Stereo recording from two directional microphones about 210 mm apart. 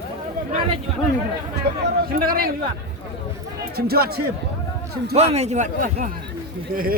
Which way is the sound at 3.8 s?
45° right (ahead or behind).